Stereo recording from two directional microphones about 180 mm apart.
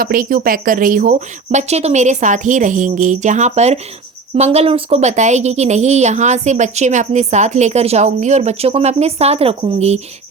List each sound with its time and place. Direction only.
0.0 s a woman's voice: 50° right (ahead or behind); by 10.0 s 35° right (ahead or behind)